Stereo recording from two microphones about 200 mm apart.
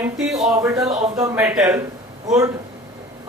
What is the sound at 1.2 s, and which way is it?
Speech, 15° right (ahead or behind).